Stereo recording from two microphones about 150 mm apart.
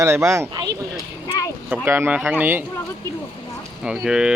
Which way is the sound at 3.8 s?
5° right (ahead or behind).